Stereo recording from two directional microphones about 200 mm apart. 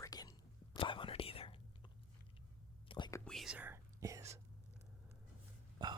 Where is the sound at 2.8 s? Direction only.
25° left (ahead or behind).